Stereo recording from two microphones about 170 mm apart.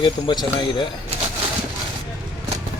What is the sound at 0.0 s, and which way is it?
Speech, 30° left (ahead or behind).